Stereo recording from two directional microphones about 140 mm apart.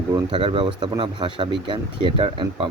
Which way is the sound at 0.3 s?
40° right (ahead or behind).